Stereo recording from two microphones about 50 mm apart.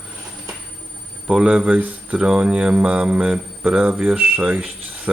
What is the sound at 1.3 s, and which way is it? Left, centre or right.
Speech, centre.